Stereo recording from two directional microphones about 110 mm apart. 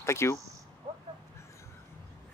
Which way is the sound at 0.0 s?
25° left (ahead or behind).